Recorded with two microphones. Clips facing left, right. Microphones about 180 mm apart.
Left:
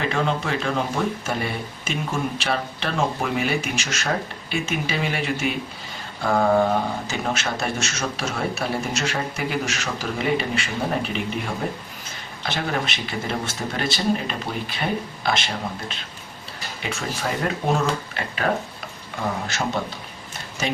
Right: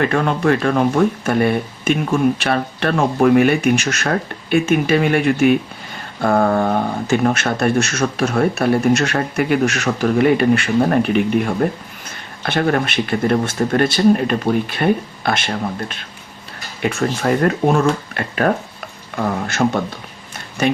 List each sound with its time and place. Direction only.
0.0 s speech: 55° right (ahead or behind)
7.1 s speech: 55° right (ahead or behind)